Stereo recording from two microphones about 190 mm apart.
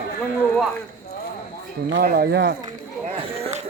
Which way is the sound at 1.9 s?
55° right (ahead or behind).